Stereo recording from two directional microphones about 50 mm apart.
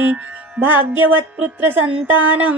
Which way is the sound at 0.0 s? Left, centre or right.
Right.